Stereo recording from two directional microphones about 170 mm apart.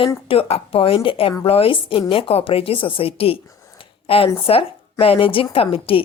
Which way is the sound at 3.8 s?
35° left (ahead or behind).